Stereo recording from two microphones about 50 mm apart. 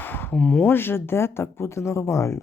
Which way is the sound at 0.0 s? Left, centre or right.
Left.